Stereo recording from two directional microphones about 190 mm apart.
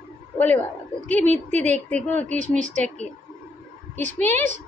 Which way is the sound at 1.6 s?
5° left (ahead or behind).